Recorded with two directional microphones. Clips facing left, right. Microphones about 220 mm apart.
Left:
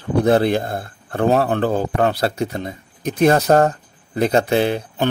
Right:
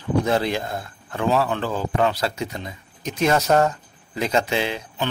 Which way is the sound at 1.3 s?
50° left (ahead or behind).